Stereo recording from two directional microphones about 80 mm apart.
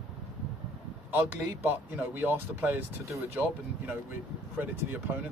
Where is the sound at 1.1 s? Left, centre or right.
Right.